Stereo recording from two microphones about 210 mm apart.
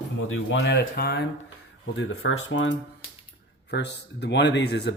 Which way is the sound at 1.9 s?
70° left (ahead or behind).